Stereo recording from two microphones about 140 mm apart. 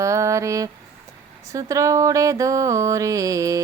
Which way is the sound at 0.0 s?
20° right (ahead or behind).